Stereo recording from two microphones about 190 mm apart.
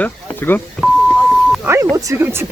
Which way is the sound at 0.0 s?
10° left (ahead or behind).